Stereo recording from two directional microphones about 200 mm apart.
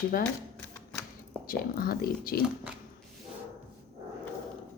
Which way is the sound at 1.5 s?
45° left (ahead or behind).